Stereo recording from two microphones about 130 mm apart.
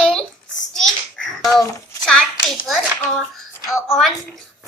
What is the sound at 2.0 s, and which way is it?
Hands, 5° left (ahead or behind).